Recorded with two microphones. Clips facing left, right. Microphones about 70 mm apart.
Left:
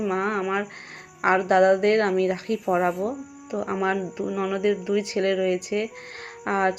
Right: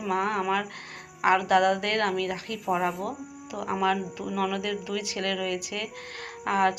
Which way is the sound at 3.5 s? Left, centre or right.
Left.